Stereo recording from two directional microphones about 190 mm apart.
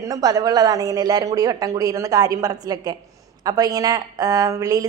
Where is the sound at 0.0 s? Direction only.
20° right (ahead or behind).